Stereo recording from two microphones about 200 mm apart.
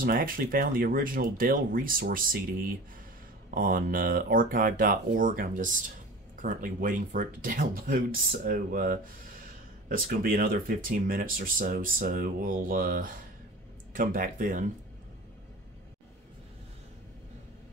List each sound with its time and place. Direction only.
0.0 s speech: 45° right (ahead or behind)